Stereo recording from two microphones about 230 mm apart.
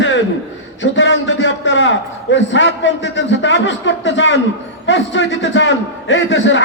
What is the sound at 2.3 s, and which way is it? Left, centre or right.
A man's voice, left.